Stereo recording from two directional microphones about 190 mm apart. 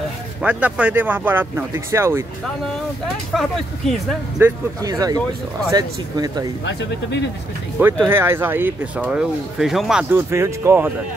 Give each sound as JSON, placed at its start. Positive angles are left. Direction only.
{"t": 0.4, "sound": "speech", "side_deg": -5}
{"t": 3.3, "sound": "speech", "side_deg": 0}
{"t": 4.4, "sound": "speech", "side_deg": -15}
{"t": 6.6, "sound": "speech", "side_deg": 65}
{"t": 7.8, "sound": "speech", "side_deg": -10}
{"t": 10.3, "sound": "speech", "side_deg": -15}